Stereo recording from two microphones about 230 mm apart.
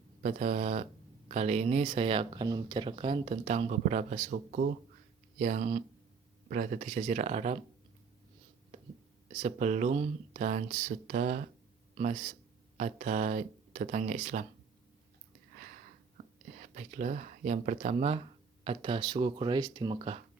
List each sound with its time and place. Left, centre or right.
0.2 s speech: right
9.3 s a man's voice: right
16.1 s speech: right